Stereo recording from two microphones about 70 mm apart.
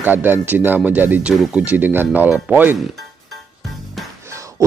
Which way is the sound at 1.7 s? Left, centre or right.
Right.